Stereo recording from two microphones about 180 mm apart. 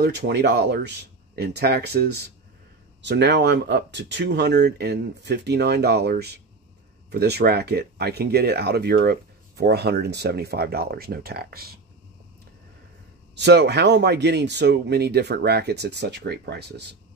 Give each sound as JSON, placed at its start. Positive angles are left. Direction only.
{"t": 0.0, "sound": "speech", "side_deg": -65}
{"t": 13.3, "sound": "speech", "side_deg": -70}